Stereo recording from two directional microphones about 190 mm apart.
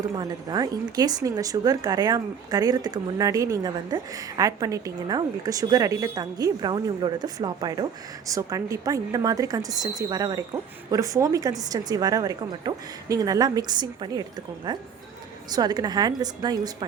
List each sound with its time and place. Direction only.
0.2 s a woman's voice: 20° right (ahead or behind)